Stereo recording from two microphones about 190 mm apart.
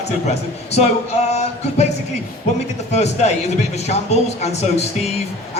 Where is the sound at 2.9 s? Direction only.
35° left (ahead or behind).